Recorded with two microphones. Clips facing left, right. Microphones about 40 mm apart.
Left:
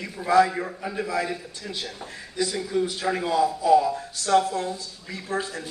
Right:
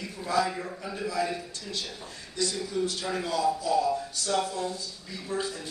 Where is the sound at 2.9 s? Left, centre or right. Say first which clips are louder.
Left 5 dB; left.